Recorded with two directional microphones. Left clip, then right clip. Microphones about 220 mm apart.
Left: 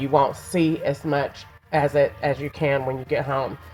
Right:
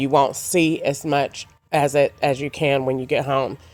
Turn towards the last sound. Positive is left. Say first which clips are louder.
# right 3 dB
turn(degrees=-50)  # may be behind; listen again after turning